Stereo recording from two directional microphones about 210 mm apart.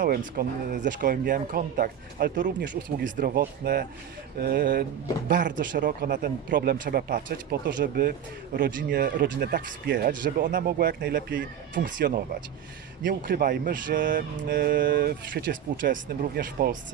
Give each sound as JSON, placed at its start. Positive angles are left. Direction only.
{"t": 0.0, "sound": "speech", "side_deg": -45}